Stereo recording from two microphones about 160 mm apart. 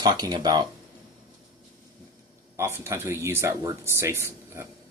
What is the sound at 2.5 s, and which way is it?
Speech, 15° right (ahead or behind).